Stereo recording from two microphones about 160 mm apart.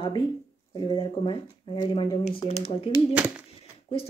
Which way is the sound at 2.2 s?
40° left (ahead or behind).